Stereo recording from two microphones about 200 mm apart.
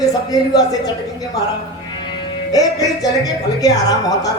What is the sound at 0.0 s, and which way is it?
Speech, 20° left (ahead or behind).